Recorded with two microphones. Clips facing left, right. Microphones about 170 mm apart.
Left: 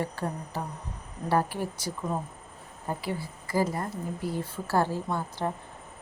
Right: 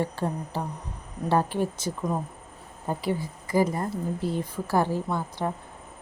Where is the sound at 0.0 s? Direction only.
25° right (ahead or behind).